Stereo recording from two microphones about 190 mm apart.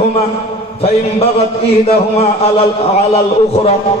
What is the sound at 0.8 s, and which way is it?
A man's voice, 30° left (ahead or behind).